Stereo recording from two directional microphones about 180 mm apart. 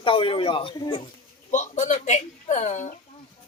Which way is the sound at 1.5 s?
40° left (ahead or behind).